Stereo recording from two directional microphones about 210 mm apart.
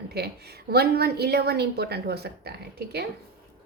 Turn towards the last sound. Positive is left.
turn(degrees=-50)  # may be behind; listen again after turning